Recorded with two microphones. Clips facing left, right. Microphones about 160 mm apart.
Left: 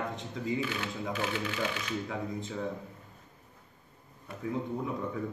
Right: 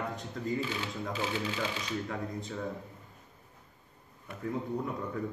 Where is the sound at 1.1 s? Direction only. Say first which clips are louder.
Even; 25° right (ahead or behind).